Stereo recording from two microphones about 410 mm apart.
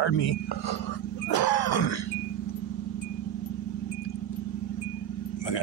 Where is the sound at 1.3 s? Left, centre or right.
Left.